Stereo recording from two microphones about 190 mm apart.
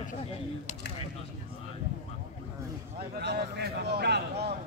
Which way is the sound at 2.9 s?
60° right (ahead or behind).